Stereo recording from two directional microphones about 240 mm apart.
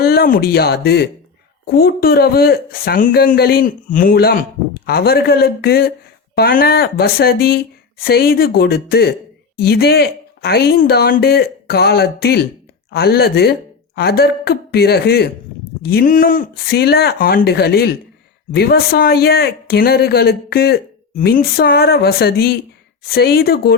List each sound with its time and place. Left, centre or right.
0.0 s speech: left